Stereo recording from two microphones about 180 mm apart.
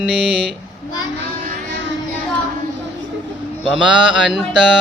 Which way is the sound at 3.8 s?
90° left.